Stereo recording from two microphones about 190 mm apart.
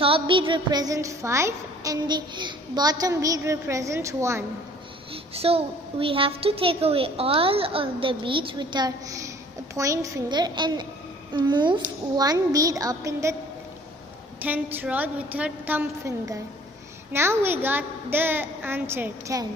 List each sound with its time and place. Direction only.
0.0 s a woman's voice: 30° right (ahead or behind)
5.1 s a child's voice: 30° right (ahead or behind)
14.4 s a woman's voice: 10° right (ahead or behind)